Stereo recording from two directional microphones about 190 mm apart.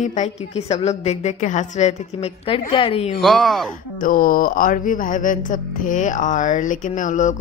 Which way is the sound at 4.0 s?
45° left (ahead or behind).